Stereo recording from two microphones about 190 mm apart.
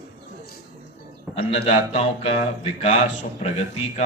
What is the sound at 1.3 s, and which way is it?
A man's voice, 30° left (ahead or behind).